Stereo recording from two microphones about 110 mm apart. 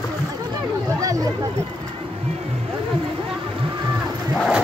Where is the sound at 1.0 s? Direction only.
30° right (ahead or behind).